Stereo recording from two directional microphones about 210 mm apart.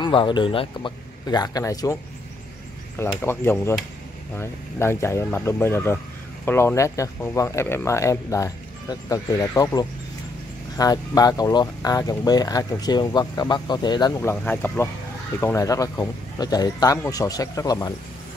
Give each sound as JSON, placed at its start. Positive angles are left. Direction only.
{"t": 0.0, "sound": "speech", "side_deg": 20}
{"t": 3.1, "sound": "speech", "side_deg": 10}
{"t": 14.3, "sound": "speech", "side_deg": 5}